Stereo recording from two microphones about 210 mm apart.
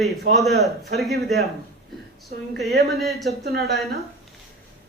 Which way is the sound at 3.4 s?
50° right (ahead or behind).